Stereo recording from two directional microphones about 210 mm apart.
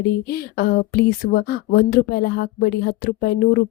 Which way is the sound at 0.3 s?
45° left (ahead or behind).